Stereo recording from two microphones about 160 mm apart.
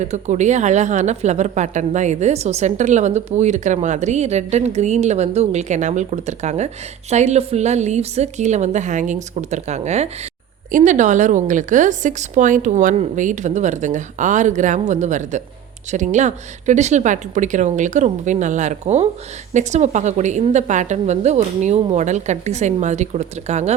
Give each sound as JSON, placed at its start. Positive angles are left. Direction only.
{"t": 0.0, "sound": "a woman's voice", "side_deg": -45}